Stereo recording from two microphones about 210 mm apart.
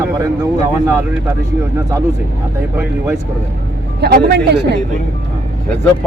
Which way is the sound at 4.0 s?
50° right (ahead or behind).